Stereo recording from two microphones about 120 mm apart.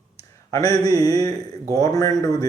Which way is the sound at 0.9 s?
30° left (ahead or behind).